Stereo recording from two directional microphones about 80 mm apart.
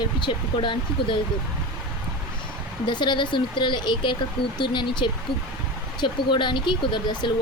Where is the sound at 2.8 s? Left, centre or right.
Left.